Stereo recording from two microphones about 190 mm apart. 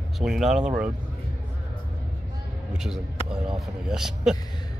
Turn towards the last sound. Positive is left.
turn(degrees=-5)  # may be behind; listen again after turning